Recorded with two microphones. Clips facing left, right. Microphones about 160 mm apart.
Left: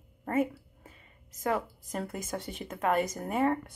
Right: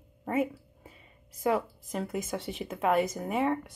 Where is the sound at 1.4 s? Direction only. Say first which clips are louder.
Right 3 dB; 5° right (ahead or behind).